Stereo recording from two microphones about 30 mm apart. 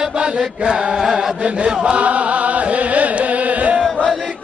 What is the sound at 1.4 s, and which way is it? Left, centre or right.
Chant, right.